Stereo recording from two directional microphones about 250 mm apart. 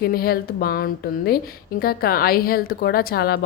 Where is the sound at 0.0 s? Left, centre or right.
Left.